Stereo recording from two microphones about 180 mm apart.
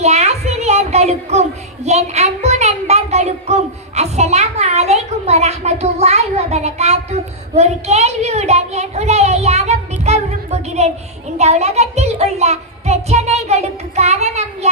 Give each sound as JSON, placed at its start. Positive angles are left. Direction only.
{"t": 0.0, "sound": "speech", "side_deg": -40}